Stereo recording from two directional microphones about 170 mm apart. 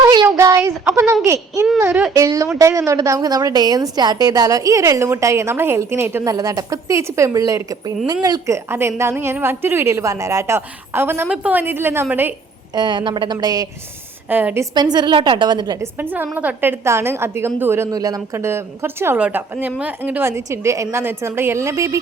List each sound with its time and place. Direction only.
0.1 s a child's voice: 25° right (ahead or behind)
12.7 s a woman's voice: 25° right (ahead or behind)
14.3 s a woman's voice: 10° right (ahead or behind)
16.0 s a woman's voice: 10° right (ahead or behind)